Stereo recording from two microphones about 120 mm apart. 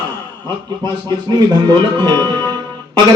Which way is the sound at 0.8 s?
35° right (ahead or behind).